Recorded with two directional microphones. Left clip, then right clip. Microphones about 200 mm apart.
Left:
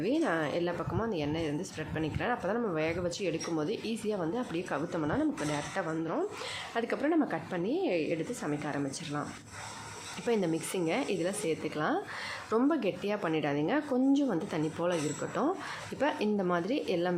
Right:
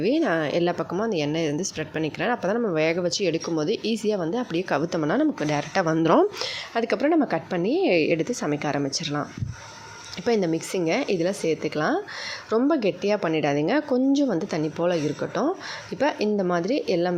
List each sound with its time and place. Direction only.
0.0 s speech: 30° right (ahead or behind)
10.2 s speech: 25° right (ahead or behind)